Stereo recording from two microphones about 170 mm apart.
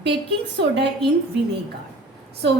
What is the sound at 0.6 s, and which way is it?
Speech, 90° right.